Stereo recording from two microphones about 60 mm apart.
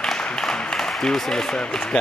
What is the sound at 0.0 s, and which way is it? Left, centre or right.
Speech, centre.